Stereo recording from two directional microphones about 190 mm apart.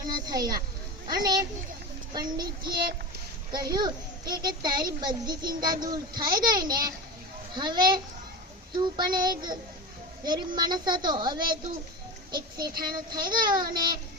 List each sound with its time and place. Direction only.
0.1 s a child's voice: 20° right (ahead or behind)